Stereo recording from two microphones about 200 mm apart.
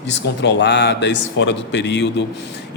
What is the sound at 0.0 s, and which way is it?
Speech, 60° left (ahead or behind).